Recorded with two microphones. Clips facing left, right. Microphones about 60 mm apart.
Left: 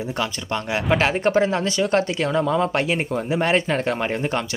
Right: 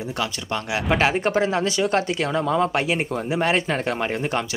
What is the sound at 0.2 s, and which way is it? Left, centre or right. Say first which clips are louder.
Speech: even; centre.